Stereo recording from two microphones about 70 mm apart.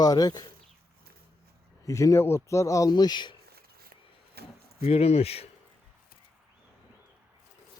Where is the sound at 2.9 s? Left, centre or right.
Left.